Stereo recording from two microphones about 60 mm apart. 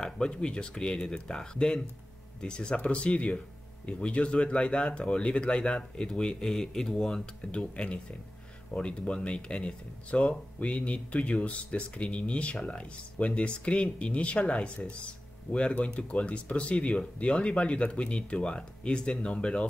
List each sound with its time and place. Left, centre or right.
0.0 s speech: centre